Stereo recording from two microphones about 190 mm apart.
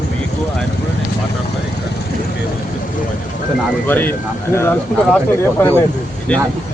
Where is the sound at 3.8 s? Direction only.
10° left (ahead or behind).